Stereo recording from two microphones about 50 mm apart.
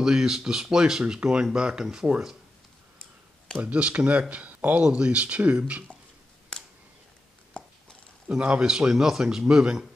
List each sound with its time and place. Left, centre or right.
0.0 s speech: centre
3.5 s speech: right
7.5 s a sound: centre
8.3 s speech: right